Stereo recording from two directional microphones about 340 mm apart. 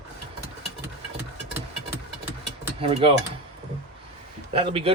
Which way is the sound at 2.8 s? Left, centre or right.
Centre.